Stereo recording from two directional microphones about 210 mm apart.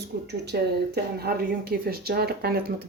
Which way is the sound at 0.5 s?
50° right (ahead or behind).